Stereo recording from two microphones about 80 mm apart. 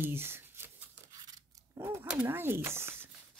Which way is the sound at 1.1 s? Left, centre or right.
Right.